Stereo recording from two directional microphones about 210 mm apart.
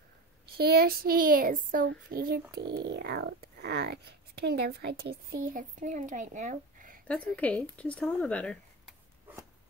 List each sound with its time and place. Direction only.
0.6 s speech: 45° right (ahead or behind)
2.5 s speech: 55° right (ahead or behind); by 7.0 s 40° right (ahead or behind)
7.3 s speech: 5° left (ahead or behind)